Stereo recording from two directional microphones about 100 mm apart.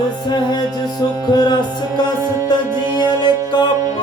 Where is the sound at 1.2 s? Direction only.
45° left (ahead or behind).